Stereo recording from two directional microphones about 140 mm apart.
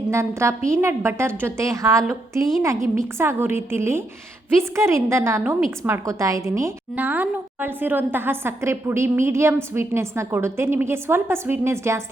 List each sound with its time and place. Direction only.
0.1 s a woman's voice: 20° right (ahead or behind)